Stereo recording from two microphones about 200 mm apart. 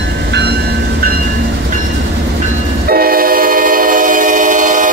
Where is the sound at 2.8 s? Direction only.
50° right (ahead or behind).